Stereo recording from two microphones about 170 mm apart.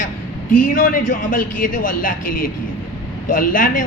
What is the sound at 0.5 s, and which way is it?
Speech, 55° left (ahead or behind).